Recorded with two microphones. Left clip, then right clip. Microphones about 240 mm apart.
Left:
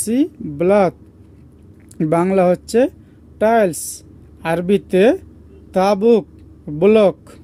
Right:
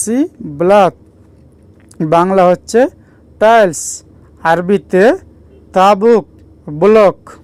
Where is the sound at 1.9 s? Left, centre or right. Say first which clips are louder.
Right 6 dB; centre.